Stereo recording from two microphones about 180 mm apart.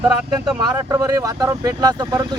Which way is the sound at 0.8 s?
15° right (ahead or behind).